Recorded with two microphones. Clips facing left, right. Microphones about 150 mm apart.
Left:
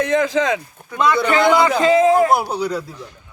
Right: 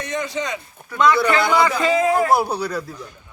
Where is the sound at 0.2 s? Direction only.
90° left.